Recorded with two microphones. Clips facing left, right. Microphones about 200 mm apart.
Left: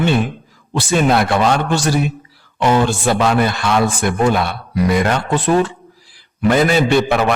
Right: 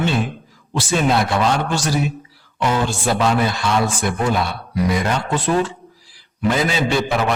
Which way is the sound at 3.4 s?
60° left (ahead or behind).